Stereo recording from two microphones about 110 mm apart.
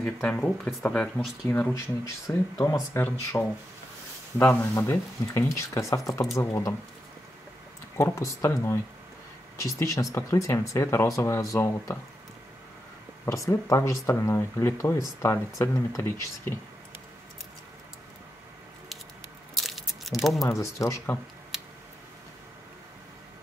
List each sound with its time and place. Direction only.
0.0 s speech: 15° left (ahead or behind)
1.7 s speech: 30° left (ahead or behind)
3.0 s speech: 20° left (ahead or behind)
8.0 s speech: 30° left (ahead or behind)
13.2 s speech: 25° left (ahead or behind)
19.5 s a sound: centre (ahead or behind)
20.4 s speech: 25° left (ahead or behind)